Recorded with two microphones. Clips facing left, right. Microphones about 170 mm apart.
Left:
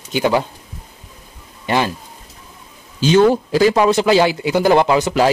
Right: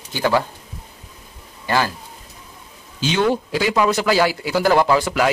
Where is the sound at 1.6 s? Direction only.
20° left (ahead or behind).